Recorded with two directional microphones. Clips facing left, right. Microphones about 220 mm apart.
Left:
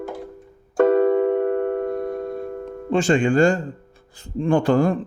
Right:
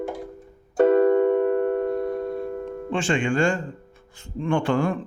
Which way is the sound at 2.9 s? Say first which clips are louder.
Left 6 dB; 40° left (ahead or behind).